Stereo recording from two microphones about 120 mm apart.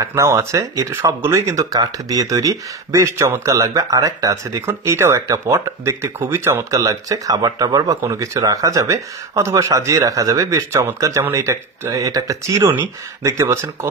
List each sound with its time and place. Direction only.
0.0 s speech: 25° right (ahead or behind)